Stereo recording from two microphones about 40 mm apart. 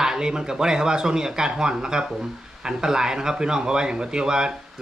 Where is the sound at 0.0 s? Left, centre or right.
Centre.